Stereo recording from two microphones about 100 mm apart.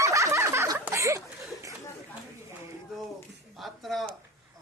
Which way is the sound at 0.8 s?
30° right (ahead or behind).